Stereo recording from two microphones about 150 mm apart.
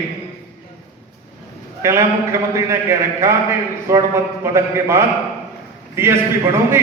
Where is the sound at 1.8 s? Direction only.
20° right (ahead or behind).